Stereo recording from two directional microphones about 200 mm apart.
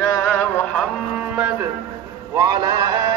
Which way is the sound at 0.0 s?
15° left (ahead or behind).